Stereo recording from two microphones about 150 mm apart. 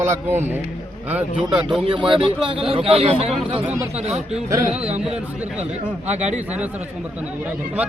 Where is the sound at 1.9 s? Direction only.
35° right (ahead or behind).